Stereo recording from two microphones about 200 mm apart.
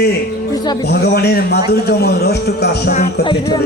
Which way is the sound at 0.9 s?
55° left (ahead or behind).